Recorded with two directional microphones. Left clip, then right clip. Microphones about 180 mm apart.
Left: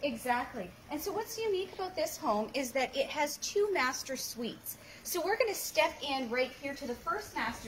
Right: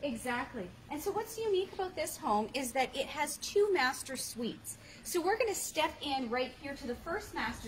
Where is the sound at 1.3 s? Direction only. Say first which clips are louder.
Right 1 dB; 30° right (ahead or behind).